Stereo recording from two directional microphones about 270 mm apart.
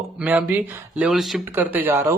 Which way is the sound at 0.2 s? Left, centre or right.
Centre.